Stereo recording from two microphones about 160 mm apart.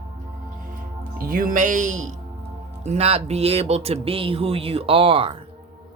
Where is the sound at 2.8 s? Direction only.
40° right (ahead or behind).